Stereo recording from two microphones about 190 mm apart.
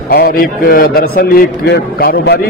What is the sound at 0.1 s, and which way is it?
A man's voice, 50° left (ahead or behind).